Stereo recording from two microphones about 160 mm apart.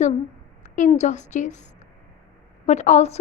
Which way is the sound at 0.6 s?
50° left (ahead or behind).